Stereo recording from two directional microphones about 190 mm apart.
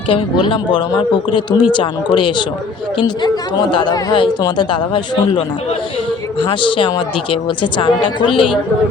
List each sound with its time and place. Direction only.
0.1 s a woman's voice: 25° left (ahead or behind)
6.5 s a woman's voice: 25° left (ahead or behind)